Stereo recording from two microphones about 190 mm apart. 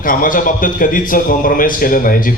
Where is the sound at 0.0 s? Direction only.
45° left (ahead or behind).